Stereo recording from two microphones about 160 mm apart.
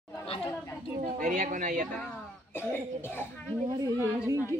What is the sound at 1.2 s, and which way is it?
Speech, 55° right (ahead or behind).